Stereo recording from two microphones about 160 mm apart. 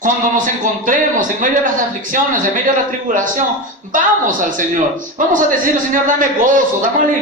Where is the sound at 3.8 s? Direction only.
55° right (ahead or behind).